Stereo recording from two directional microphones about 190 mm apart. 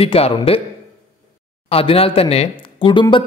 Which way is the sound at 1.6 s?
30° left (ahead or behind).